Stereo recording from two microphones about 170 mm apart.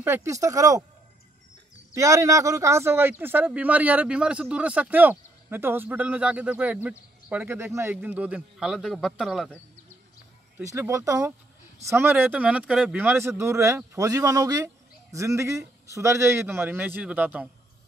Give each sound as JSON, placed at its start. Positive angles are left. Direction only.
{"t": 0.0, "sound": "speech", "side_deg": -15}
{"t": 2.0, "sound": "a man's voice", "side_deg": -20}
{"t": 10.6, "sound": "a man's voice", "side_deg": -20}